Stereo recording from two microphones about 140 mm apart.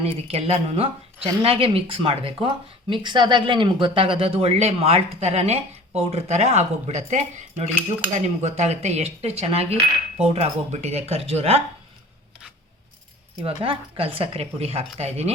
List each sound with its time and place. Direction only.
0.0 s speech: 45° right (ahead or behind)
13.4 s speech: 40° right (ahead or behind)